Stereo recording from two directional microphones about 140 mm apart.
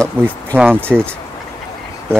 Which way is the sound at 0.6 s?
15° right (ahead or behind).